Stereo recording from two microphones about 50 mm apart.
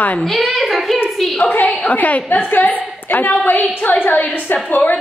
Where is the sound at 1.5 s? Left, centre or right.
Left.